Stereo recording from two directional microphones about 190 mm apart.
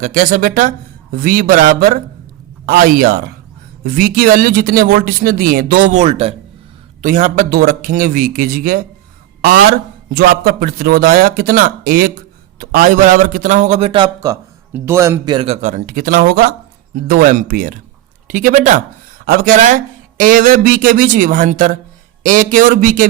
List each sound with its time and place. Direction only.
0.0 s a man's voice: 45° right (ahead or behind)
7.0 s a man's voice: 45° right (ahead or behind)